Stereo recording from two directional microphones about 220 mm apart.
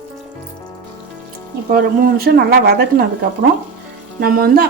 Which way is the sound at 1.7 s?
40° right (ahead or behind).